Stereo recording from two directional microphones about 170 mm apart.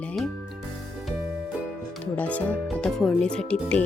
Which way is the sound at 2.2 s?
10° left (ahead or behind).